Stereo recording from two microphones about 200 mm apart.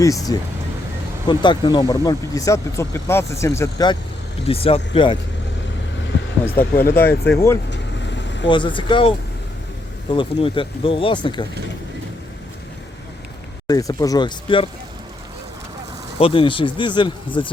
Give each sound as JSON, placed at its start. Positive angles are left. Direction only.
{"t": 0.0, "sound": "speech", "side_deg": 15}
{"t": 4.4, "sound": "speech", "side_deg": 30}
{"t": 6.4, "sound": "speech", "side_deg": 10}
{"t": 7.7, "sound": "vehicle", "side_deg": 60}
{"t": 8.4, "sound": "speech", "side_deg": 25}
{"t": 13.7, "sound": "speech", "side_deg": 15}
{"t": 16.1, "sound": "speech", "side_deg": 25}